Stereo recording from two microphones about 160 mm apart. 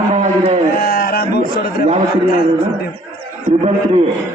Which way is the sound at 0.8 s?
70° left (ahead or behind).